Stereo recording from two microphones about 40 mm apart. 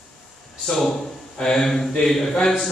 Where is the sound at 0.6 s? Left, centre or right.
Centre.